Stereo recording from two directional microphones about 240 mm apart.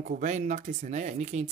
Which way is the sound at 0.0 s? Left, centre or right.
Right.